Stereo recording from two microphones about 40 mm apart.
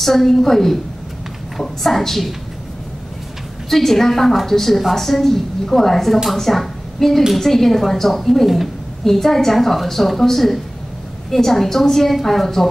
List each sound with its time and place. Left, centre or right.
0.0 s a woman's voice: centre
3.7 s a woman's voice: centre